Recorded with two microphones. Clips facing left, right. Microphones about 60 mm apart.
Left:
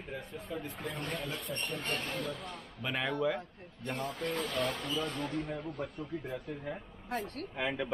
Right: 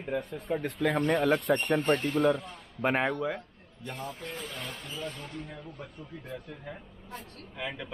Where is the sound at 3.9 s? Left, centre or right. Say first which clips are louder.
Left 4 dB; left.